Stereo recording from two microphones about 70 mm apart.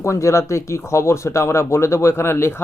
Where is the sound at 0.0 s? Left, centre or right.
Left.